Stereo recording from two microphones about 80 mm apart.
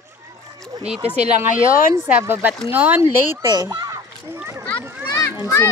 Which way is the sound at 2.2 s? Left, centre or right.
Right.